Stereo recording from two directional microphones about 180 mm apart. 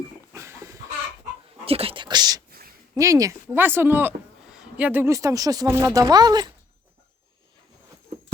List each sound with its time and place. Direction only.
0.3 s goat: 15° right (ahead or behind)
1.6 s a sound: 30° right (ahead or behind)
2.9 s speech: 20° right (ahead or behind)